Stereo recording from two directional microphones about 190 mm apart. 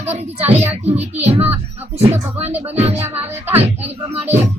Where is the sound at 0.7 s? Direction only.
35° right (ahead or behind).